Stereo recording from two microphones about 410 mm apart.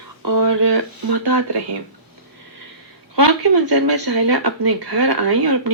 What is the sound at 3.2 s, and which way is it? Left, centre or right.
Speech, right.